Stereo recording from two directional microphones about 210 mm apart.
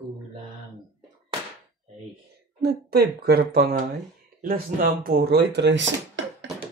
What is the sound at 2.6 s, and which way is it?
Speech, 50° right (ahead or behind).